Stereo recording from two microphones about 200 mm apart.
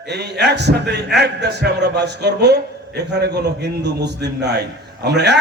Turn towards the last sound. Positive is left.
turn(degrees=-55)  # may be behind; listen again after turning